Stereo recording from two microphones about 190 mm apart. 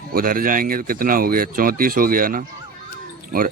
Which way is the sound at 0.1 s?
50° right (ahead or behind).